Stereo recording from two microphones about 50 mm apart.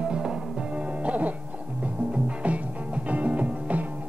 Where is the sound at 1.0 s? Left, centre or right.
Right.